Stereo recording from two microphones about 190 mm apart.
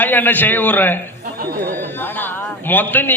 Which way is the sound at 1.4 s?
50° right (ahead or behind).